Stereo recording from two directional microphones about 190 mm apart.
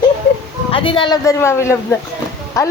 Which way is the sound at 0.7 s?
25° left (ahead or behind).